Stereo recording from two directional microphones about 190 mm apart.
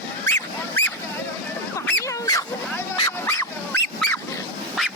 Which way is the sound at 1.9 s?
15° left (ahead or behind).